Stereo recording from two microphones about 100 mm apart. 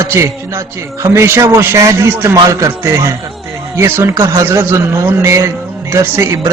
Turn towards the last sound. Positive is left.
turn(degrees=-30)  # may be behind; listen again after turning